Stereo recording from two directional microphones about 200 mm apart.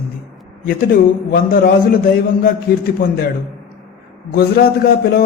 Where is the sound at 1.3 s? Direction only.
45° left (ahead or behind).